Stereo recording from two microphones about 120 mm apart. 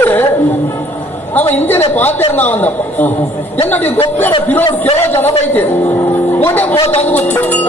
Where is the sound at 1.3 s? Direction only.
15° left (ahead or behind).